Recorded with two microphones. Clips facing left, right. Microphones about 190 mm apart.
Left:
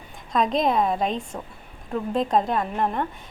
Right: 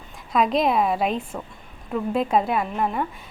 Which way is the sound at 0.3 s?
5° right (ahead or behind).